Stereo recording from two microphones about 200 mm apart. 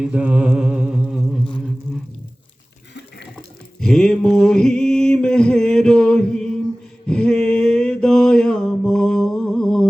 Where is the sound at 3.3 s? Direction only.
5° left (ahead or behind).